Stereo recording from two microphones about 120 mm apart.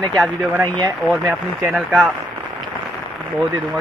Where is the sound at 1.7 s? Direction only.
5° right (ahead or behind).